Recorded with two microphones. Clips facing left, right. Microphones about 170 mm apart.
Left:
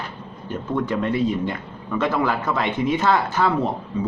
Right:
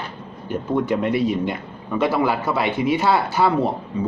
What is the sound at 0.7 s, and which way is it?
Speech, 15° right (ahead or behind).